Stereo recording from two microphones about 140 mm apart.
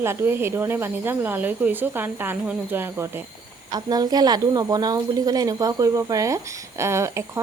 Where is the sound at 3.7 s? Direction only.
30° right (ahead or behind).